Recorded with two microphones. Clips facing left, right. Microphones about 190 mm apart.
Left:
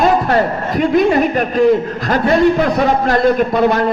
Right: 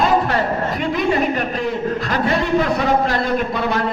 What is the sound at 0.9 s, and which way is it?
Speech, 45° left (ahead or behind).